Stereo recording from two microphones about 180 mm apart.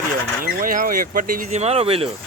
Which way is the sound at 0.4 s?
50° right (ahead or behind).